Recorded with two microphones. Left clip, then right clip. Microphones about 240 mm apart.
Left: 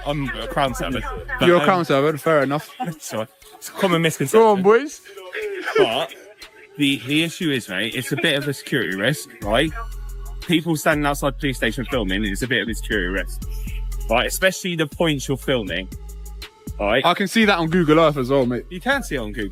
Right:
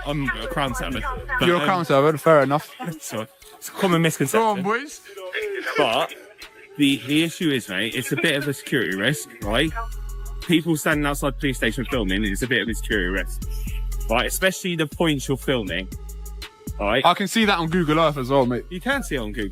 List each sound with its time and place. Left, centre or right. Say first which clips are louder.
0.0 s speech: left 1 dB; centre
1.8 s speech: right 1 dB; centre
2.9 s speech: left 1 dB; centre
4.2 s speech: even; centre
4.6 s a sound: left 9 dB; centre
6.7 s speech: even; centre
7.0 s speech: even; centre
18.7 s speech: left 3 dB; centre